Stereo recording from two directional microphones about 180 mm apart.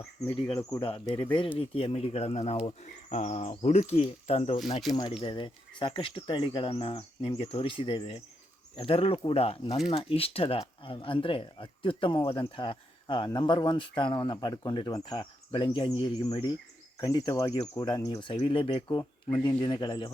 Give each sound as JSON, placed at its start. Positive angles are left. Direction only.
{"t": 0.8, "sound": "speech", "side_deg": 30}
{"t": 4.9, "sound": "speech", "side_deg": 25}